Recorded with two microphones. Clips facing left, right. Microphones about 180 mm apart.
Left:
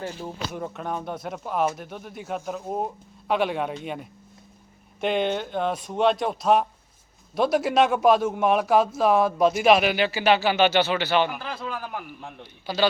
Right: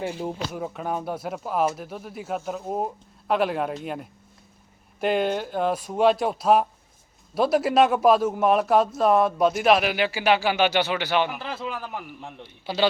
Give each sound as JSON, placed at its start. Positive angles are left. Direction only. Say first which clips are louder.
{"t": 0.5, "sound": "speech", "louder": "right 2 dB", "side_deg": -5}
{"t": 11.3, "sound": "speech", "louder": "right 1 dB", "side_deg": 0}
{"t": 12.4, "sound": "a man's voice", "louder": "even", "side_deg": -25}